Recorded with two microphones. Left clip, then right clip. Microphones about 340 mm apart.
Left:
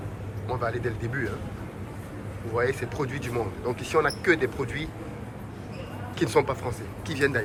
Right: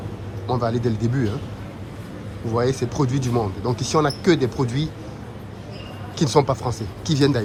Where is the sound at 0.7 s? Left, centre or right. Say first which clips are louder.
Right 6 dB; centre.